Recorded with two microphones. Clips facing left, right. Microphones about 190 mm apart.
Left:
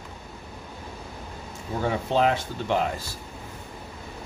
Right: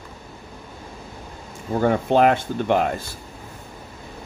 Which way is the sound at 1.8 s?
55° right (ahead or behind).